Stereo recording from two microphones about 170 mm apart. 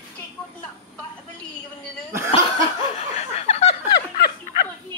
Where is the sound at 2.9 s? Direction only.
40° left (ahead or behind).